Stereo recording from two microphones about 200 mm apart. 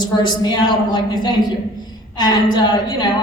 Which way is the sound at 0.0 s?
20° left (ahead or behind).